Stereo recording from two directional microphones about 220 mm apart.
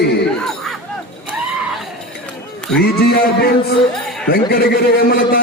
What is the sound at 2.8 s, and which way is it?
Speech, 45° left (ahead or behind).